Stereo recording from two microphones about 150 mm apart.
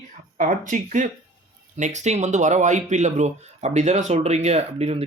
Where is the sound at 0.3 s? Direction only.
60° right (ahead or behind).